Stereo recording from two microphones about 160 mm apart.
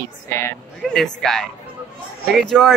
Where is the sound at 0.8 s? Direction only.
5° left (ahead or behind).